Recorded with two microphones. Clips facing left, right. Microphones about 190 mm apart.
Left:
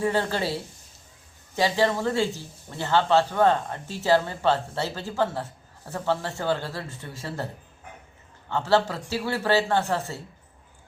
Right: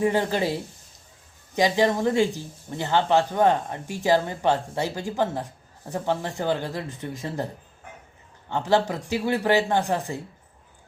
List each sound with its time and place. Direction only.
0.0 s speech: 15° right (ahead or behind)